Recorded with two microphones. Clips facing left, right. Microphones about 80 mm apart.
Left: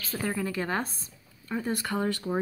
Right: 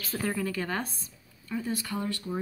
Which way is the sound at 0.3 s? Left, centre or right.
Centre.